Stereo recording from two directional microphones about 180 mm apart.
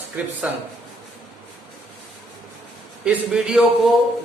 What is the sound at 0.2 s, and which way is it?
Speech, 10° right (ahead or behind).